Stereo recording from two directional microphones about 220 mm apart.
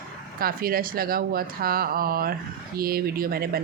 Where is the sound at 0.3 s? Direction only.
40° right (ahead or behind).